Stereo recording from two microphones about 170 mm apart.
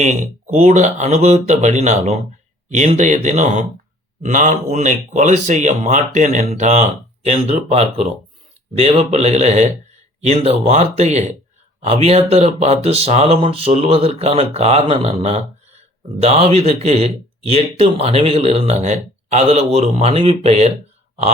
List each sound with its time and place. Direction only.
0.0 s speech: 45° right (ahead or behind)